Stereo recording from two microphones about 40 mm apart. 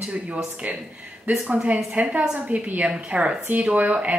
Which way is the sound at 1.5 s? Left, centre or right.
Right.